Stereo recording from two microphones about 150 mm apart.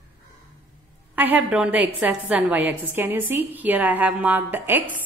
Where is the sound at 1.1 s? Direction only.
10° right (ahead or behind).